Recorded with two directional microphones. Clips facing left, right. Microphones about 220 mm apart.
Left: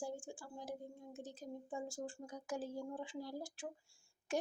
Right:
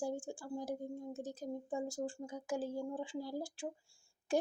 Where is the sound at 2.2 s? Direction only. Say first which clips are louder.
Right 5 dB; 25° right (ahead or behind).